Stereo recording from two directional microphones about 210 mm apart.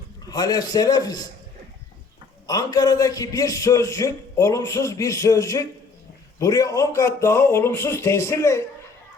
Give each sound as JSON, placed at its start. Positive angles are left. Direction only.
{"t": 0.3, "sound": "a man's voice", "side_deg": 20}
{"t": 2.5, "sound": "a man's voice", "side_deg": 15}